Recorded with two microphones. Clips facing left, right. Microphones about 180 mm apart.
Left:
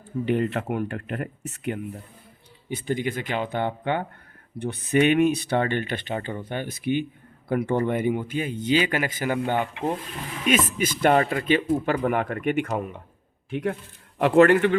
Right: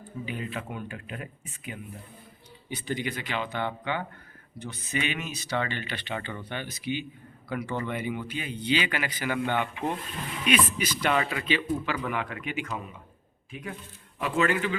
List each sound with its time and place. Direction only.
0.3 s speech: 70° left (ahead or behind)
2.6 s speech: 50° left (ahead or behind)
10.7 s speech: 50° left (ahead or behind)